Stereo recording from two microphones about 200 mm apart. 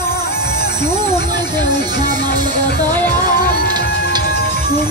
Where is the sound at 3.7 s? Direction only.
20° right (ahead or behind).